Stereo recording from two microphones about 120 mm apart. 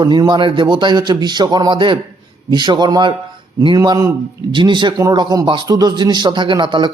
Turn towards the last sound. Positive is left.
turn(degrees=-40)  # may be behind; listen again after turning